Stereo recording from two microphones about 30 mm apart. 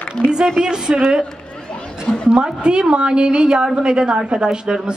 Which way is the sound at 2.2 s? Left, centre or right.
Right.